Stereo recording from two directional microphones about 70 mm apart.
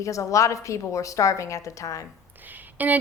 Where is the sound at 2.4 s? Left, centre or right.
Right.